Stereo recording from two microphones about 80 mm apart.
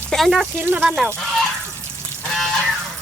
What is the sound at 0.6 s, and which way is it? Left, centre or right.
Speech, right.